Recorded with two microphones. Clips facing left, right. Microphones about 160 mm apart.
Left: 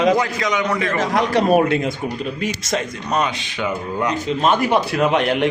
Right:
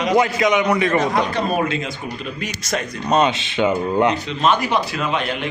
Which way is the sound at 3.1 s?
25° right (ahead or behind).